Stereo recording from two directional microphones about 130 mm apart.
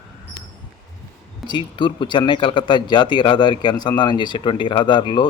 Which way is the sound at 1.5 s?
35° left (ahead or behind).